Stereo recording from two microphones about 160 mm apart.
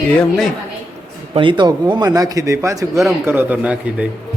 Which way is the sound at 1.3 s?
30° right (ahead or behind).